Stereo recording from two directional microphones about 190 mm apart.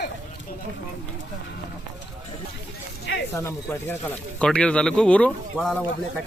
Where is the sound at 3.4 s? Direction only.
15° left (ahead or behind).